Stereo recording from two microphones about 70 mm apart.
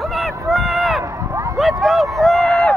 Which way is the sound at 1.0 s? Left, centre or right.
Right.